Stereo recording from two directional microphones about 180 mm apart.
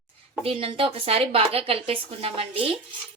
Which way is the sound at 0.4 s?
30° right (ahead or behind).